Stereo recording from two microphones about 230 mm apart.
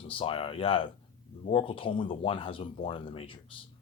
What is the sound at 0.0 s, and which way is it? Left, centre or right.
Speech, left.